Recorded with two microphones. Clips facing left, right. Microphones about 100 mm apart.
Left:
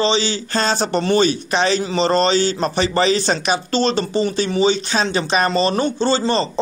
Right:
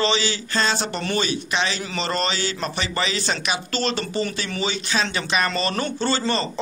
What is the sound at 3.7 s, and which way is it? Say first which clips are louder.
Speech: left 7 dB; 25° left (ahead or behind).